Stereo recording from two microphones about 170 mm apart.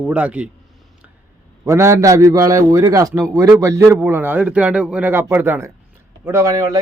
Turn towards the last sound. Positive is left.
turn(degrees=-20)  # may be behind; listen again after turning